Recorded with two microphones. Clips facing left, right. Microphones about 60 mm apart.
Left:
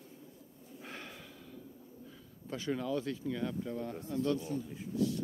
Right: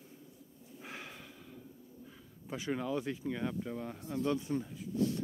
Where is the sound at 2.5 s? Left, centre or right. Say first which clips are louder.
Left 1 dB; centre.